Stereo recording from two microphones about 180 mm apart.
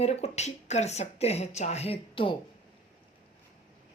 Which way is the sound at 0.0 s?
35° left (ahead or behind).